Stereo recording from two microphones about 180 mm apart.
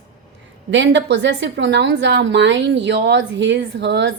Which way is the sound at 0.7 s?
80° right.